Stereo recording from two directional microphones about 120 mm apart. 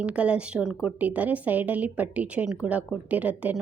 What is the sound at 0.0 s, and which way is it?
A woman's voice, 10° right (ahead or behind).